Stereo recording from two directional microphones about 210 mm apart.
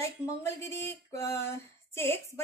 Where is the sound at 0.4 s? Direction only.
15° left (ahead or behind).